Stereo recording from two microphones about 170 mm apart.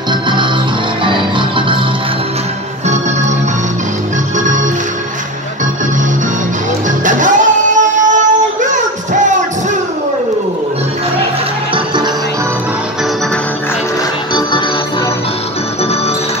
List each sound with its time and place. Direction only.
7.1 s child singing: 45° right (ahead or behind)